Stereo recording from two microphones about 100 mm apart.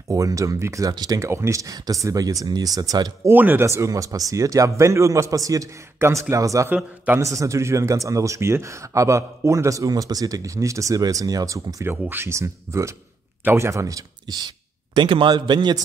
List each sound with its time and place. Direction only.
0.1 s a man's voice: 35° right (ahead or behind)
3.3 s a man's voice: 20° right (ahead or behind); by 14.5 s 40° right (ahead or behind)
15.0 s a man's voice: 55° right (ahead or behind)